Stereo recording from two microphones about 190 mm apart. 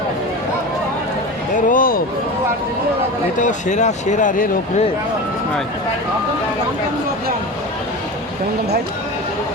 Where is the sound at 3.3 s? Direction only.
40° left (ahead or behind).